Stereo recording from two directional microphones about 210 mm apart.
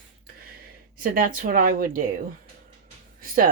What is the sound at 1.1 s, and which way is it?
Speech, 40° right (ahead or behind).